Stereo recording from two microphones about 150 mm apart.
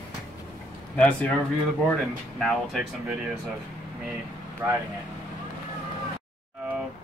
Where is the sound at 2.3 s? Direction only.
Centre (ahead or behind).